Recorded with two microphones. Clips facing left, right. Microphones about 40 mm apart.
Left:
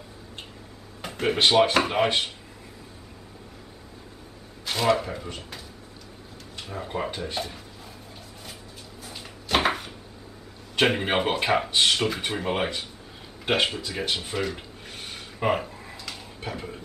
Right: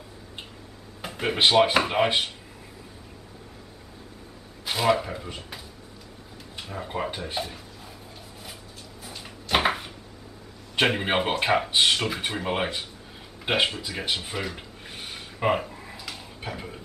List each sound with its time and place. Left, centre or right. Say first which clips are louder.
1.0 s speech: even; centre
4.6 s speech: even; centre
6.6 s speech: even; centre
9.0 s a sound: even; centre
10.8 s speech: left 1 dB; centre
13.5 s a sound: even; centre